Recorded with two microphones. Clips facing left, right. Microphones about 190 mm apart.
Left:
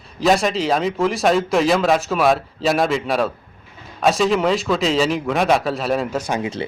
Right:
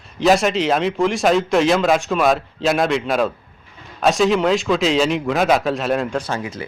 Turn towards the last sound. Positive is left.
turn(degrees=30)  # may be behind; listen again after turning